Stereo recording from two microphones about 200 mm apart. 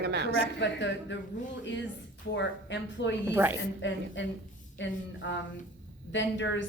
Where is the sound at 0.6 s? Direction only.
60° left (ahead or behind).